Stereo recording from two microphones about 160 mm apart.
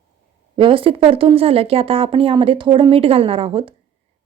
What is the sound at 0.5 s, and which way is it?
A woman's voice, 35° right (ahead or behind).